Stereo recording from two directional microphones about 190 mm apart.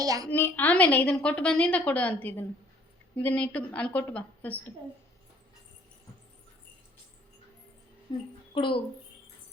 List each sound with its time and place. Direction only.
0.0 s a woman's voice: 20° right (ahead or behind)
0.3 s a woman's voice: 10° left (ahead or behind)
8.1 s a woman's voice: 25° left (ahead or behind)